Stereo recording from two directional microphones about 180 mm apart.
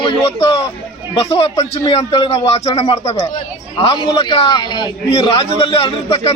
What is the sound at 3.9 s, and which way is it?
A man's voice, 20° left (ahead or behind).